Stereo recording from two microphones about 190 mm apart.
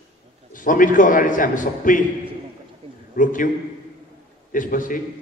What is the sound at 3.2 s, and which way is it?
Speech, 45° left (ahead or behind).